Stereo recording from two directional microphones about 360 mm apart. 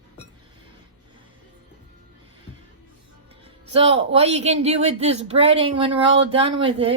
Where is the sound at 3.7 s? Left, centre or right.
Centre.